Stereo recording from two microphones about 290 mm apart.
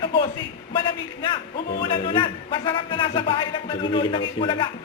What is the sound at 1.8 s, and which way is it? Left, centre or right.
A man's voice, centre.